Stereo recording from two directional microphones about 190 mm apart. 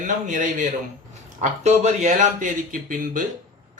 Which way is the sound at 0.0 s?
45° right (ahead or behind).